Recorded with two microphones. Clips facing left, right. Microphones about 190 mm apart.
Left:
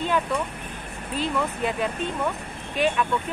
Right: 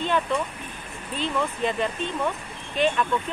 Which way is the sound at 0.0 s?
5° left (ahead or behind).